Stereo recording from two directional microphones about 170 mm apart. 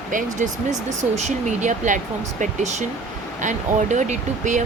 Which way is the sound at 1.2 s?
45° right (ahead or behind).